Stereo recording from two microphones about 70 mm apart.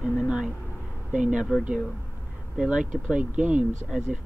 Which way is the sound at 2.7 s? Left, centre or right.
Centre.